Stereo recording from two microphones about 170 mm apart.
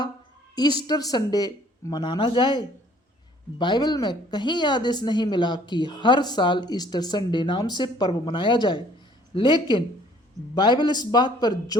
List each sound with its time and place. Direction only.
0.5 s a woman's voice: 25° left (ahead or behind)